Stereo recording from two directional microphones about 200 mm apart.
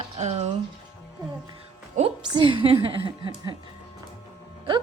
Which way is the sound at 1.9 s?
25° right (ahead or behind).